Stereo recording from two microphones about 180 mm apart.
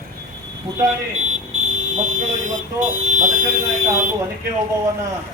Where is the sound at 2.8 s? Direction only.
45° right (ahead or behind).